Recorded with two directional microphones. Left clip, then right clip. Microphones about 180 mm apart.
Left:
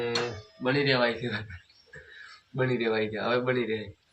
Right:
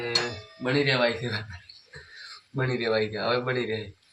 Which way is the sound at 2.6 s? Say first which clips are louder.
Right 1 dB; 20° right (ahead or behind).